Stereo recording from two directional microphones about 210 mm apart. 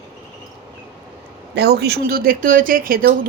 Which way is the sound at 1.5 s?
50° right (ahead or behind).